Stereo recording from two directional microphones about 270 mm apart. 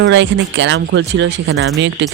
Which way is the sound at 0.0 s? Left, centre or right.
Right.